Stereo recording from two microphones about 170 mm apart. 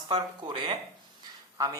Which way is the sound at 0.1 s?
25° right (ahead or behind).